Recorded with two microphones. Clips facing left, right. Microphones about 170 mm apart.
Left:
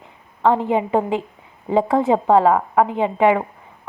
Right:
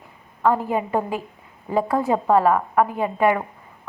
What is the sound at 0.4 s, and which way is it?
A woman's voice, 25° left (ahead or behind).